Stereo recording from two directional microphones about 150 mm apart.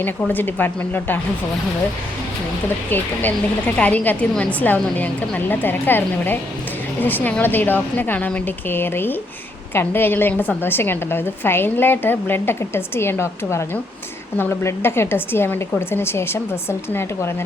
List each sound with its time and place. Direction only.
0.0 s a woman's voice: 15° left (ahead or behind)
2.9 s a woman's voice: 10° left (ahead or behind)